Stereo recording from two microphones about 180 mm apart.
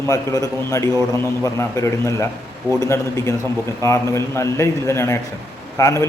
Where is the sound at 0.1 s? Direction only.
20° left (ahead or behind).